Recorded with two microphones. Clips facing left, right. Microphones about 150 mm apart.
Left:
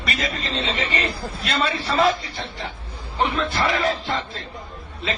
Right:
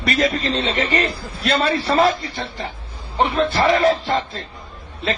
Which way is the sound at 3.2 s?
35° right (ahead or behind).